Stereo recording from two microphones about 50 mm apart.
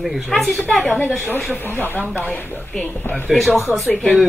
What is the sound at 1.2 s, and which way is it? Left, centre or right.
Speech, left.